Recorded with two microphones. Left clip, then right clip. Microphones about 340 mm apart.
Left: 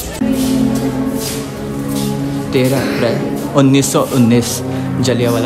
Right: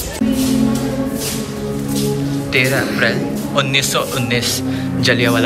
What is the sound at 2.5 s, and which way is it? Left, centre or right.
A man's voice, centre.